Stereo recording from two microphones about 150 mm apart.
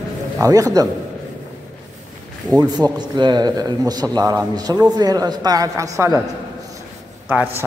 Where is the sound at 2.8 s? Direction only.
30° right (ahead or behind).